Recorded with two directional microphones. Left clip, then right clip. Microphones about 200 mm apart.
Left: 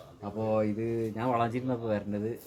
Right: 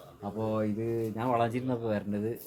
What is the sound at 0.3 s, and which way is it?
Speech, 15° right (ahead or behind).